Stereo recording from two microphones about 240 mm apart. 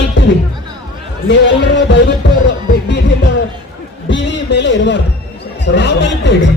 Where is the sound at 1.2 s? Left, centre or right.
Left.